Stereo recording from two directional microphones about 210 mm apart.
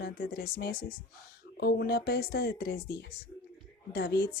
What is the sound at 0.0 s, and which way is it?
A woman's voice, 45° left (ahead or behind).